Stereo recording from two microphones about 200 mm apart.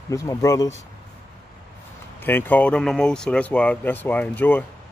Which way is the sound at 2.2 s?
10° left (ahead or behind).